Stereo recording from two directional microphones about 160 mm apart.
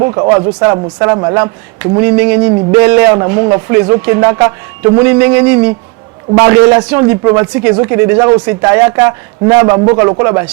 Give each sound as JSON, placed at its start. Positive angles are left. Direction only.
{"t": 0.0, "sound": "a man's voice", "side_deg": -20}